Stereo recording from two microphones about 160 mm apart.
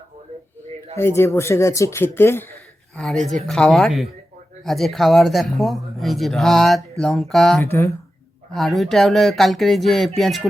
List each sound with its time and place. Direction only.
0.9 s speech: 15° left (ahead or behind)
2.9 s speech: centre (ahead or behind)
7.6 s speech: 20° left (ahead or behind)
8.5 s speech: centre (ahead or behind)